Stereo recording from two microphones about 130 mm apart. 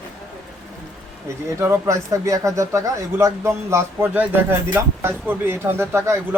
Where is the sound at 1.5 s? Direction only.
20° right (ahead or behind).